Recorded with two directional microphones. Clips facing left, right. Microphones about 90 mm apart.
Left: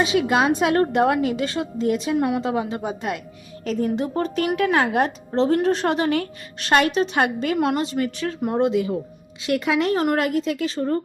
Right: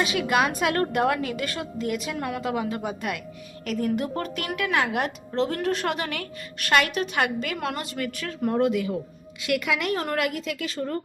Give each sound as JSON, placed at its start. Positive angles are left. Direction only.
{"t": 0.0, "sound": "speech", "side_deg": 25}